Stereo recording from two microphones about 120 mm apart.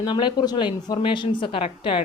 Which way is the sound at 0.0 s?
40° left (ahead or behind).